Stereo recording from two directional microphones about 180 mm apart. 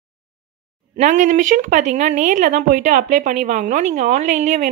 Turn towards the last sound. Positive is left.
turn(degrees=-45)  # may be behind; listen again after turning